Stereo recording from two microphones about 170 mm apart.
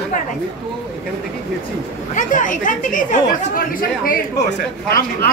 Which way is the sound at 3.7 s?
60° left (ahead or behind).